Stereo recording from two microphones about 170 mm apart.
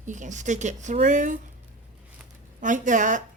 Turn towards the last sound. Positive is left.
turn(degrees=-50)  # may be behind; listen again after turning